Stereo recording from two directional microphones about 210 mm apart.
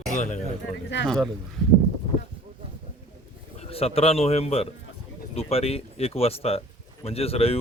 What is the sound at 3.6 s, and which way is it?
Speech, 30° left (ahead or behind).